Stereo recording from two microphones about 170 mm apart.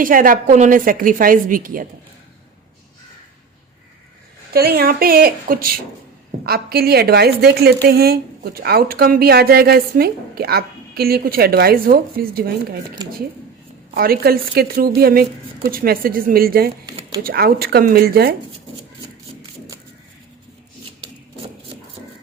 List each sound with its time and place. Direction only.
0.0 s a woman's voice: 55° right (ahead or behind)
4.5 s a woman's voice: 65° right (ahead or behind)
13.0 s speech: 20° right (ahead or behind)
13.9 s a woman's voice: 60° right (ahead or behind)